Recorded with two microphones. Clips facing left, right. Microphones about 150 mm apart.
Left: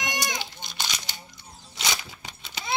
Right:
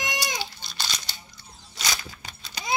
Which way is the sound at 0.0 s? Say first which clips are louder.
Even; 20° left (ahead or behind).